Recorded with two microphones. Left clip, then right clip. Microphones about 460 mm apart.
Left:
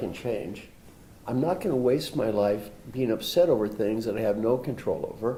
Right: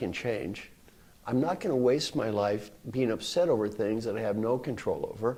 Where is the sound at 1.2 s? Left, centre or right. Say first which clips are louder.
Left 2 dB; right.